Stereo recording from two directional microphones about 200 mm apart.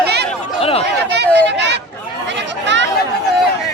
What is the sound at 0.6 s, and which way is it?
Chatter, 30° left (ahead or behind).